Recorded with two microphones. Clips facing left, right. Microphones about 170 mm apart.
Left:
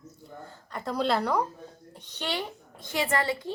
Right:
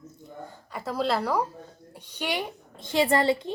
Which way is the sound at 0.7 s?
5° right (ahead or behind).